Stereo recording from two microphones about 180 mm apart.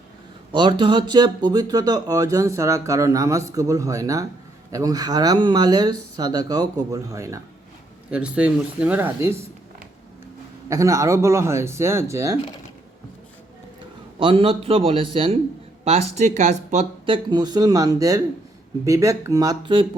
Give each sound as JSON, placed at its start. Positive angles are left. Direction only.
{"t": 0.5, "sound": "speech", "side_deg": -25}
{"t": 8.1, "sound": "speech", "side_deg": -5}
{"t": 10.7, "sound": "speech", "side_deg": -15}
{"t": 14.2, "sound": "a man's voice", "side_deg": -30}
{"t": 17.1, "sound": "speech", "side_deg": -25}